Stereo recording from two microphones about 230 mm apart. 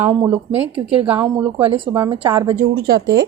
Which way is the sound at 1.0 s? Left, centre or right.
Centre.